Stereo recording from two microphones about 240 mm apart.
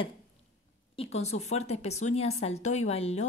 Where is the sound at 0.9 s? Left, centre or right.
Left.